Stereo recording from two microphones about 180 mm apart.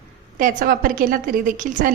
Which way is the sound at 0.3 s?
50° right (ahead or behind).